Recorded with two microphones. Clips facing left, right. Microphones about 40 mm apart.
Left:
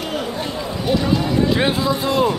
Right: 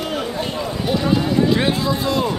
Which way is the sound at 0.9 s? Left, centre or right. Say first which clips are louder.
Even; centre.